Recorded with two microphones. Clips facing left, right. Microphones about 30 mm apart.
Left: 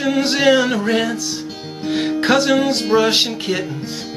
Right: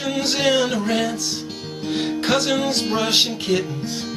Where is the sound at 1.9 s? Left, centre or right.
Left.